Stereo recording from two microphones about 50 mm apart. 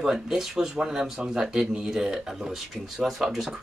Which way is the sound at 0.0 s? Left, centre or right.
Centre.